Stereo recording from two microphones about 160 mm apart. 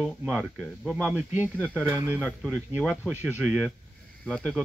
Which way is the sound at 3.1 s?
10° right (ahead or behind).